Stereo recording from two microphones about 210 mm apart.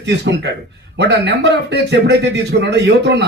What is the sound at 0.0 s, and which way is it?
Speech, 55° right (ahead or behind).